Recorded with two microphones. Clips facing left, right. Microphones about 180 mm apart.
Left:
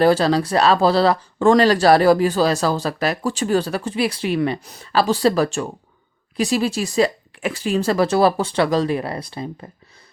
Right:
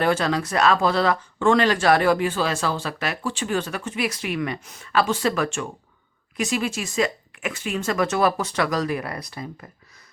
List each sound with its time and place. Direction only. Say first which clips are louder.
0.0 s speech: left 6 dB; 35° left (ahead or behind)